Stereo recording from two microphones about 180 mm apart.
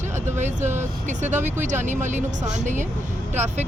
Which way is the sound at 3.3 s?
40° right (ahead or behind).